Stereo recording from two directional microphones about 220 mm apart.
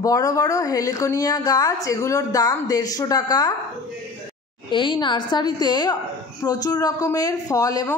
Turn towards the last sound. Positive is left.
turn(degrees=15)  # may be behind; listen again after turning